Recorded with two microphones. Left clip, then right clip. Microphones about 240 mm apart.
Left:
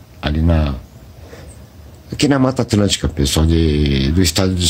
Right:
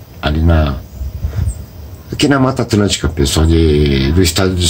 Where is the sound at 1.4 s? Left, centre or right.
Left.